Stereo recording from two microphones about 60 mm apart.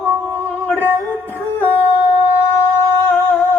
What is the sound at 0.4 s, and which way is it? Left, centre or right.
Music, left.